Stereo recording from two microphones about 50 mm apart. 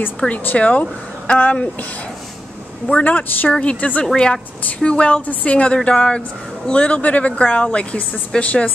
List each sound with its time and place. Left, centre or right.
0.3 s a woman's voice: left
2.9 s a woman's voice: left